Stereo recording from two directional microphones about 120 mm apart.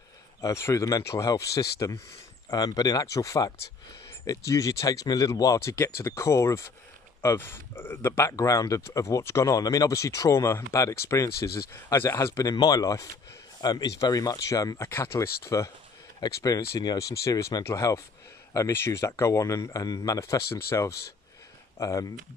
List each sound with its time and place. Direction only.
0.4 s speech: 25° left (ahead or behind)